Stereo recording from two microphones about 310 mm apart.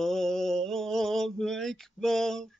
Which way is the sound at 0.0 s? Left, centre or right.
Centre.